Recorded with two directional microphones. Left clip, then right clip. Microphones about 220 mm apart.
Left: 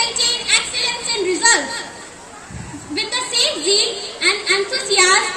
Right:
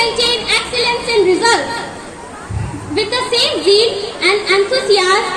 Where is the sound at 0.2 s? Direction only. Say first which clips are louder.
Right 3 dB; 50° left (ahead or behind).